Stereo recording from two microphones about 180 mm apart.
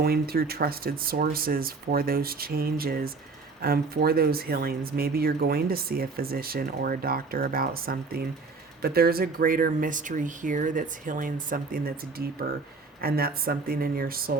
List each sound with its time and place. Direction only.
0.0 s speech: 60° right (ahead or behind)